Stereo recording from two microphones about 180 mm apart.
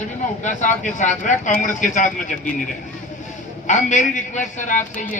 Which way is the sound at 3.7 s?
40° left (ahead or behind).